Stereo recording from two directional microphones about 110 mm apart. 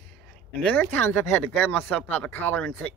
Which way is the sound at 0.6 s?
15° left (ahead or behind).